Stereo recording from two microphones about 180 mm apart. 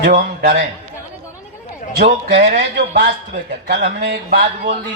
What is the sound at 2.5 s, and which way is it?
A man's voice, 50° right (ahead or behind).